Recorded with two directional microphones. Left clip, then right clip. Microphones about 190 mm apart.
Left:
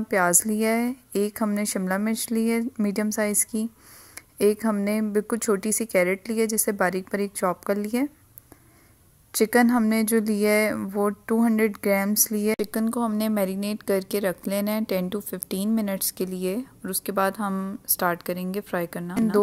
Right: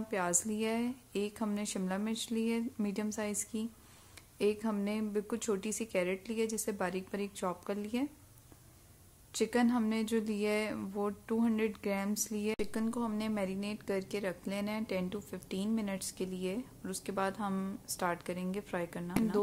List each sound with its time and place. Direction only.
0.1 s speech: 35° left (ahead or behind)
4.1 s a sound: 35° left (ahead or behind)
4.8 s speech: 35° left (ahead or behind)
9.3 s speech: 35° left (ahead or behind)